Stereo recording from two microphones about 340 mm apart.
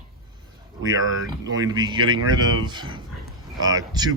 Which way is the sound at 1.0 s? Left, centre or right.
Right.